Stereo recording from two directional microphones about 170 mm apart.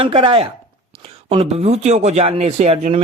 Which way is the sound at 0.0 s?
30° right (ahead or behind).